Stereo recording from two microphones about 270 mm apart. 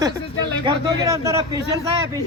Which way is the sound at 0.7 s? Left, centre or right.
Centre.